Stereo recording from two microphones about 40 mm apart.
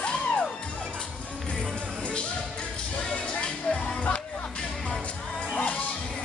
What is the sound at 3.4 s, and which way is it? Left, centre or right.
Music, left.